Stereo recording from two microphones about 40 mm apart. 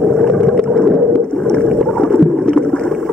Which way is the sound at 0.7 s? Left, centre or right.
Centre.